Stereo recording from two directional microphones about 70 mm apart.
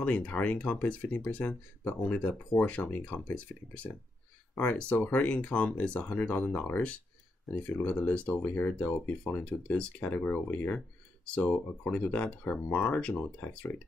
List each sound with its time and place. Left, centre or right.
0.0 s speech: centre